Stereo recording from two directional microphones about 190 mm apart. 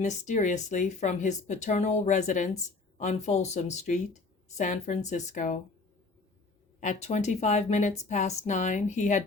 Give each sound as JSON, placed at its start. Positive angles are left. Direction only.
{"t": 0.0, "sound": "speech", "side_deg": 40}
{"t": 6.7, "sound": "speech", "side_deg": 40}